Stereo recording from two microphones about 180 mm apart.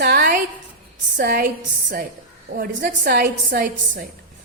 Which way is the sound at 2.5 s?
55° right (ahead or behind).